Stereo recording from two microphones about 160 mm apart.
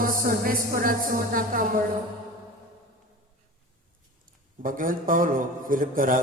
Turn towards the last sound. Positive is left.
turn(degrees=-55)  # may be behind; listen again after turning